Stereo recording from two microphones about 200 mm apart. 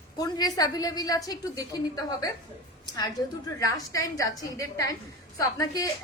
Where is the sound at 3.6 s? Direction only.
15° left (ahead or behind).